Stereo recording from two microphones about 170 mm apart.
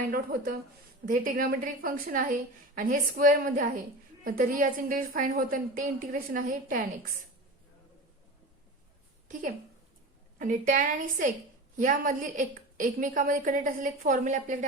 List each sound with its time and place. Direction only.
0.1 s a woman's voice: 60° right (ahead or behind)
10.3 s a woman's voice: 55° right (ahead or behind)